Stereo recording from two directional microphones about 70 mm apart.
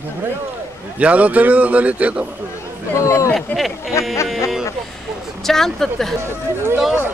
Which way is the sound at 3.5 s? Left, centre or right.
Centre.